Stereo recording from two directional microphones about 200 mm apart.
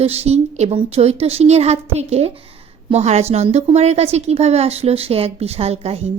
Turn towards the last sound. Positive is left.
turn(degrees=-30)  # may be behind; listen again after turning